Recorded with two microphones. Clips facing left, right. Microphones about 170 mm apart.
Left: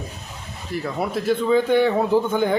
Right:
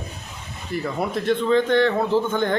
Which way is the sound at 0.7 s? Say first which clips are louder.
Even; centre (ahead or behind).